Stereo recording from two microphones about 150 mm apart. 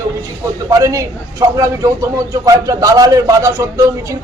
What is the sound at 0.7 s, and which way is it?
A man's voice, 25° right (ahead or behind).